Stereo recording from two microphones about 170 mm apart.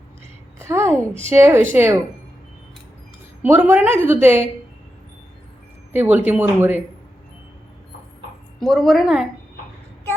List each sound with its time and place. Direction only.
0.6 s a sound: 15° right (ahead or behind)
1.3 s a woman's voice: 15° right (ahead or behind)
3.4 s a woman's voice: 10° right (ahead or behind)
5.9 s a woman's voice: 10° right (ahead or behind)
8.5 s a woman's voice: centre (ahead or behind)